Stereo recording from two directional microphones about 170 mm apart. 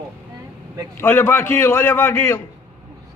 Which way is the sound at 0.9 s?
15° left (ahead or behind).